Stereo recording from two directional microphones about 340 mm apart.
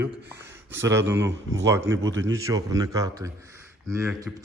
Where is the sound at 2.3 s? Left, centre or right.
Centre.